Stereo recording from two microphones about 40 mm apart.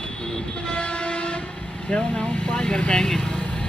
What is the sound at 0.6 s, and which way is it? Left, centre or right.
Train, left.